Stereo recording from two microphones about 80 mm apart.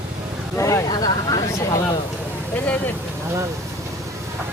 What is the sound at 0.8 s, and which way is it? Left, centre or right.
Speech, left.